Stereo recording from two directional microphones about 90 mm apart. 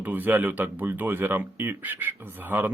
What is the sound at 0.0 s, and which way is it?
Speech, 20° right (ahead or behind).